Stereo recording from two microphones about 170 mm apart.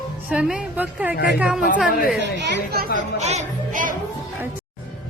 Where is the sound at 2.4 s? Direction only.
65° right (ahead or behind).